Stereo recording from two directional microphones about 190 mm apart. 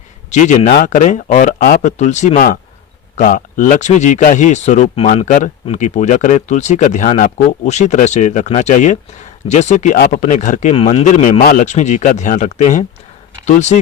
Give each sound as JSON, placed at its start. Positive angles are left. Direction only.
{"t": 0.3, "sound": "speech", "side_deg": 40}